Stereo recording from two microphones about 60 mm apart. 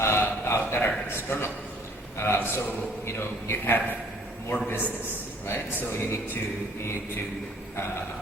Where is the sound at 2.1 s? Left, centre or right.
Left.